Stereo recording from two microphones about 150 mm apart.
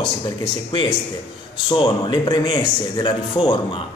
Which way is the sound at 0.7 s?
35° left (ahead or behind).